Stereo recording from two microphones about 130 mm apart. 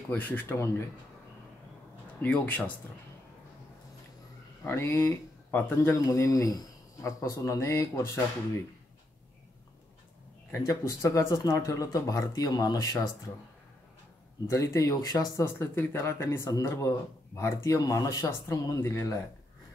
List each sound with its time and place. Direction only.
0.1 s speech: 20° left (ahead or behind)
2.2 s speech: 10° left (ahead or behind)
4.6 s speech: 20° left (ahead or behind)
10.5 s speech: 25° left (ahead or behind)
14.5 s speech: 25° left (ahead or behind)